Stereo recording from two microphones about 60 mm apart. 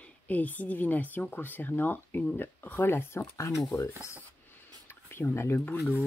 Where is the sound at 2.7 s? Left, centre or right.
Left.